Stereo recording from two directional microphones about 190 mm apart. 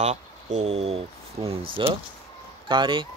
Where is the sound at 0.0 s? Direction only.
35° right (ahead or behind).